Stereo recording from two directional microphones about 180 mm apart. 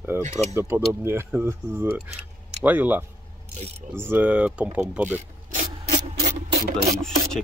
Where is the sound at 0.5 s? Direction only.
15° right (ahead or behind).